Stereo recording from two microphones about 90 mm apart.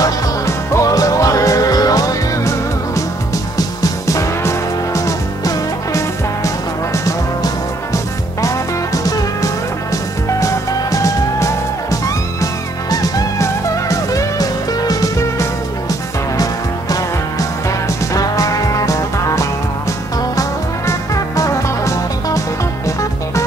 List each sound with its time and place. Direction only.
0.0 s music: 35° left (ahead or behind)
16.9 s music: 40° left (ahead or behind)